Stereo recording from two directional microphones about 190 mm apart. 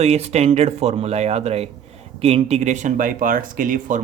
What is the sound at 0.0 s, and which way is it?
Speech, 35° right (ahead or behind).